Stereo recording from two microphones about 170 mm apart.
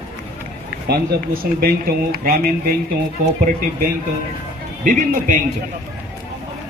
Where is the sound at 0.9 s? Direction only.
65° right (ahead or behind).